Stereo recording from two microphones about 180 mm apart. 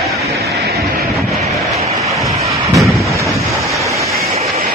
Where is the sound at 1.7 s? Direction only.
35° right (ahead or behind).